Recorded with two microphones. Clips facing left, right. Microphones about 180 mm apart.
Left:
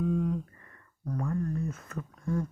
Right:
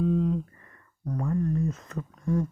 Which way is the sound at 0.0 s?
25° right (ahead or behind).